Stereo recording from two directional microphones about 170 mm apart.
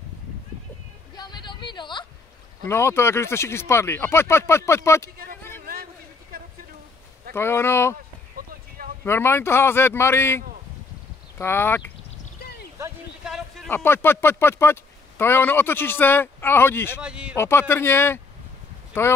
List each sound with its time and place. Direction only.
1.1 s a sound: 25° left (ahead or behind)
2.7 s speech: 15° left (ahead or behind)
5.1 s speech: 60° right (ahead or behind)
6.3 s a sound: 60° right (ahead or behind)
7.3 s speech: 15° left (ahead or behind)
8.4 s clip-clop: 60° right (ahead or behind)
9.0 s speech: 15° left (ahead or behind)
13.2 s a sound: centre (ahead or behind)
13.7 s speech: 10° left (ahead or behind)
17.0 s speech: 5° right (ahead or behind)
17.4 s speech: 15° left (ahead or behind)